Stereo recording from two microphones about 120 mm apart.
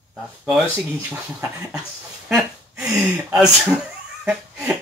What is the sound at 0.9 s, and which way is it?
Speech, 20° right (ahead or behind).